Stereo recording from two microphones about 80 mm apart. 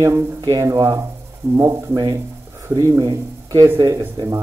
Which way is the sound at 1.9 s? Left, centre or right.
Right.